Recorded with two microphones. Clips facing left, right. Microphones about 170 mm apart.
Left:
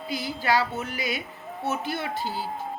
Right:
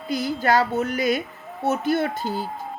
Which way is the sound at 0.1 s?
45° right (ahead or behind).